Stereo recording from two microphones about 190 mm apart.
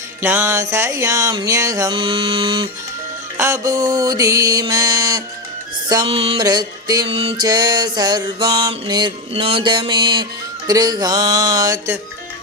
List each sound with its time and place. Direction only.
0.2 s music: 10° right (ahead or behind); by 2.6 s 25° right (ahead or behind)
3.3 s music: 15° right (ahead or behind)